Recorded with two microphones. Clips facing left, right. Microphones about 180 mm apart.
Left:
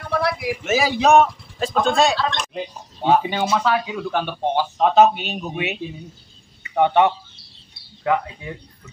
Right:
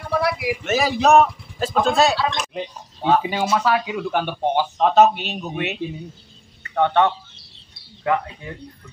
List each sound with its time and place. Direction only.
0.0 s a man's voice: 5° right (ahead or behind)
4.1 s a man's voice: 15° right (ahead or behind)
4.7 s speech: centre (ahead or behind)
6.6 s speech: 10° left (ahead or behind)